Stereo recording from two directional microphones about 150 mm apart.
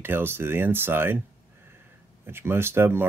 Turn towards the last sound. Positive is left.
turn(degrees=-15)  # may be behind; listen again after turning